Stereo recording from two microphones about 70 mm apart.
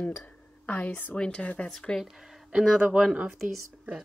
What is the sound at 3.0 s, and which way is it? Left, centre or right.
Speech, centre.